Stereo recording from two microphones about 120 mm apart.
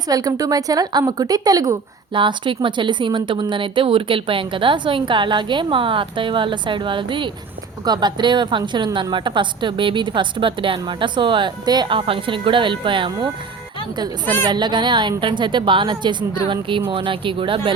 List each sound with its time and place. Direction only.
0.1 s a woman's voice: 30° right (ahead or behind)
2.1 s a woman's voice: 45° right (ahead or behind)